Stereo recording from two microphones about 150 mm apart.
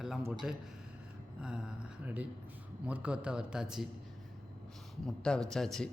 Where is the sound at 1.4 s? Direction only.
5° right (ahead or behind).